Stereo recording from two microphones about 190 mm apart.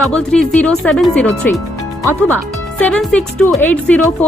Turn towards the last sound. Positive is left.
turn(degrees=10)  # may be behind; listen again after turning